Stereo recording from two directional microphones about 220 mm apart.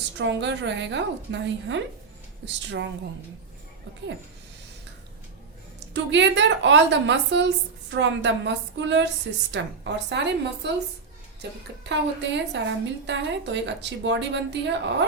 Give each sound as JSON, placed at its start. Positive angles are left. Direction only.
{"t": 0.2, "sound": "a woman's voice", "side_deg": -55}
{"t": 5.9, "sound": "a woman's voice", "side_deg": -55}